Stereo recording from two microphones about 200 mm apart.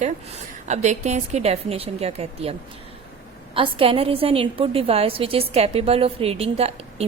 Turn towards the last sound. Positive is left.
turn(degrees=-30)  # may be behind; listen again after turning